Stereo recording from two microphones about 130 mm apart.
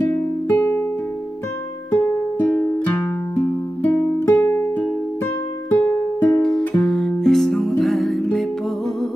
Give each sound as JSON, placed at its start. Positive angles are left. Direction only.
{"t": 0.5, "sound": "music", "side_deg": 20}
{"t": 1.9, "sound": "music", "side_deg": 20}